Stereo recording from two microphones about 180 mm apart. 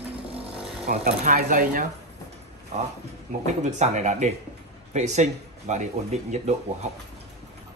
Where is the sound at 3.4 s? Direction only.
40° right (ahead or behind).